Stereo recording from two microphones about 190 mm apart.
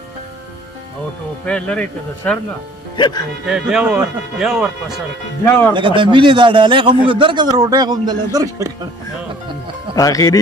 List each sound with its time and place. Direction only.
1.4 s speech: 5° left (ahead or behind)
3.0 s speech: 20° left (ahead or behind)
3.4 s speech: centre (ahead or behind)
5.4 s speech: 10° left (ahead or behind)
5.8 s a man's voice: 25° right (ahead or behind)
9.9 s speech: 20° left (ahead or behind)